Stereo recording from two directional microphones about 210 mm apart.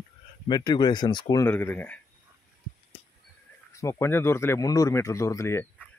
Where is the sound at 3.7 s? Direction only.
15° left (ahead or behind).